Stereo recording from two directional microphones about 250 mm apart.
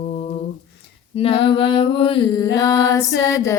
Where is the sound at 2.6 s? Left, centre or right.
Centre.